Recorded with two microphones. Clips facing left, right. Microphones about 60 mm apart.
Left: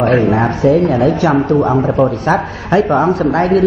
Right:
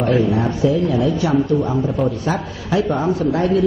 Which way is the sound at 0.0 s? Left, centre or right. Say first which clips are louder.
Left 5 dB; left.